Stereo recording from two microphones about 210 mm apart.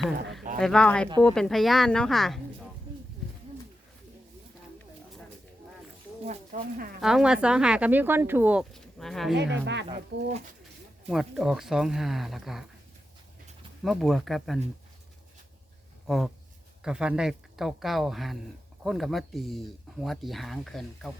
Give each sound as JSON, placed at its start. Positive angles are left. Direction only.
{"t": 0.6, "sound": "speech", "side_deg": 5}
{"t": 6.2, "sound": "speech", "side_deg": -40}
{"t": 7.0, "sound": "speech", "side_deg": -5}
{"t": 9.3, "sound": "speech", "side_deg": -55}
{"t": 11.1, "sound": "speech", "side_deg": 0}
{"t": 13.8, "sound": "speech", "side_deg": 0}
{"t": 16.0, "sound": "speech", "side_deg": 0}